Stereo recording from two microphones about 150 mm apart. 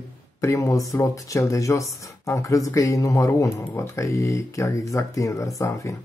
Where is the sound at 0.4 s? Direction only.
20° left (ahead or behind).